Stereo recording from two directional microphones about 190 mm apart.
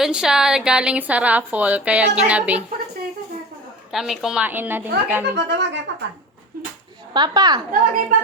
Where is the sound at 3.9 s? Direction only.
Centre (ahead or behind).